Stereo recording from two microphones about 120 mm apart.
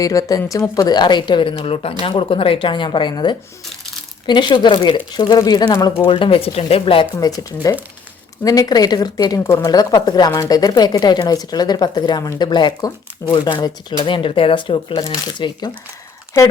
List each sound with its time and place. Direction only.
0.0 s speech: 30° left (ahead or behind)
0.8 s a woman's voice: 40° left (ahead or behind)
6.1 s speech: 45° left (ahead or behind)
7.2 s a woman's voice: 30° left (ahead or behind)
9.4 s speech: 20° left (ahead or behind)
9.6 s a woman's voice: 35° left (ahead or behind)